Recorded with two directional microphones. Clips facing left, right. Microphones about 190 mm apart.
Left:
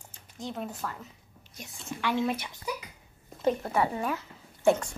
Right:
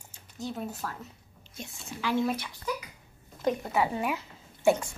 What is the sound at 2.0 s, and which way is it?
Speech, 5° right (ahead or behind).